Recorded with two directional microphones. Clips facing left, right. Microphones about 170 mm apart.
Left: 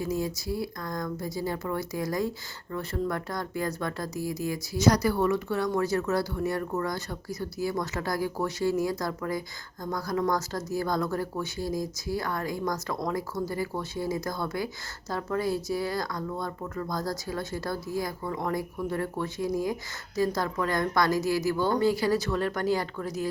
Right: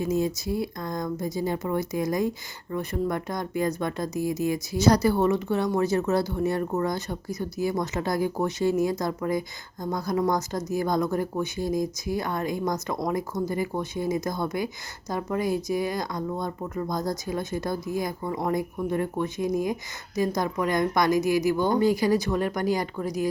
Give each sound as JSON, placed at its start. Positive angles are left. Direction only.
{"t": 0.0, "sound": "a woman's voice", "side_deg": -20}